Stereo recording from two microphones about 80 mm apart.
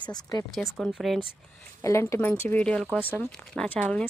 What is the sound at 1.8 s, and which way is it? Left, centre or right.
Speech, left.